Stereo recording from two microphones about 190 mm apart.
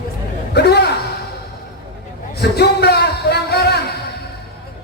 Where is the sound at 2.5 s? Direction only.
60° left (ahead or behind).